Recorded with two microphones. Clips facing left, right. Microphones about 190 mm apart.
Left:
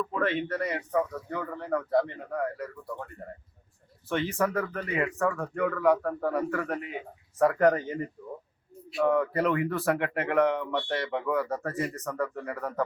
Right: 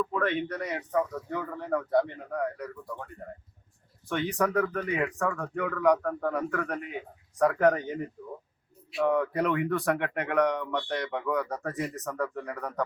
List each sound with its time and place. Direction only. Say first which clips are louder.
0.1 s speech: even; 5° left (ahead or behind)
4.1 s speech: even; centre (ahead or behind)
9.0 s speech: left 1 dB; centre (ahead or behind)